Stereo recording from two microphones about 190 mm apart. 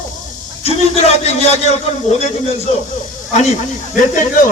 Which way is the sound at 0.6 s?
35° left (ahead or behind).